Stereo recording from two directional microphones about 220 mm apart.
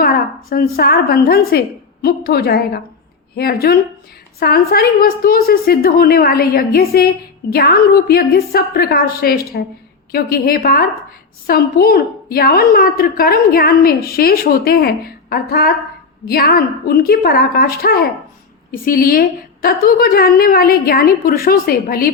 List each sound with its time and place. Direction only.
0.0 s a woman's voice: 40° left (ahead or behind)